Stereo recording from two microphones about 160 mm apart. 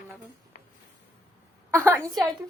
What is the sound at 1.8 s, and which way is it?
Speech, 15° right (ahead or behind).